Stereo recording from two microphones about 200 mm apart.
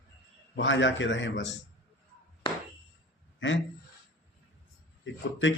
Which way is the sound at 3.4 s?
70° left (ahead or behind).